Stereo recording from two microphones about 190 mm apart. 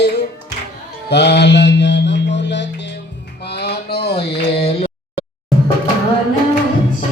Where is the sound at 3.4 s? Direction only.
60° left (ahead or behind).